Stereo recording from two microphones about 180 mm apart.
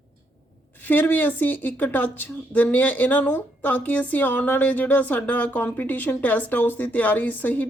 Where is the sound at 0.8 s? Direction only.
10° left (ahead or behind).